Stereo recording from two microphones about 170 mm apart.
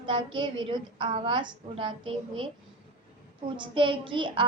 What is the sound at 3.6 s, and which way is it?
Speech, 30° right (ahead or behind).